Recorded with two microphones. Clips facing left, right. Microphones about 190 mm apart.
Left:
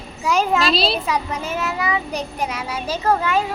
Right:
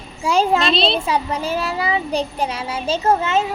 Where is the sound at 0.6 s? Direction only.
5° left (ahead or behind).